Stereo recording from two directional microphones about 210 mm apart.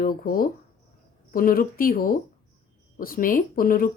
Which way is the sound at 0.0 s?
45° left (ahead or behind).